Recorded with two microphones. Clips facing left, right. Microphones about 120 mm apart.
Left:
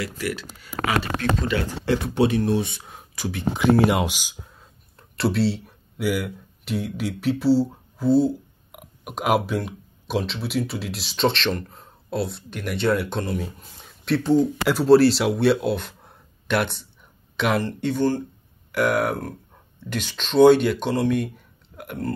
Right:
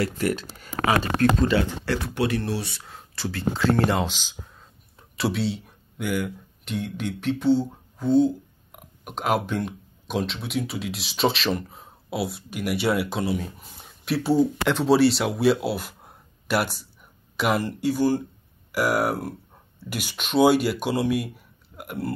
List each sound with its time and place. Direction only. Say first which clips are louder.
0.0 s speech: right 4 dB; 45° right (ahead or behind)
1.9 s speech: left 4 dB; 20° left (ahead or behind)
4.9 s speech: left 3 dB; centre (ahead or behind)
14.6 s speech: left 4 dB; 5° left (ahead or behind)